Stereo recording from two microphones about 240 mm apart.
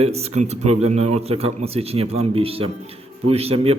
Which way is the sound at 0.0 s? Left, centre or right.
Right.